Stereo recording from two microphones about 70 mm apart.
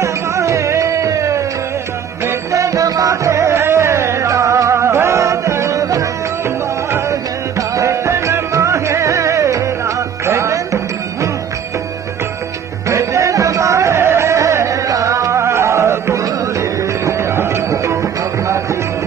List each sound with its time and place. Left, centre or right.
0.0 s music: right
3.3 s music: right
12.8 s music: right